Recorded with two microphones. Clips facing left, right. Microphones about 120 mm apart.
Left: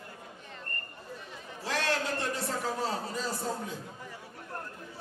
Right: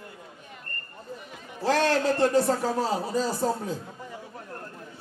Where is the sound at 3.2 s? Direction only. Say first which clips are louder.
Right 8 dB; 35° right (ahead or behind).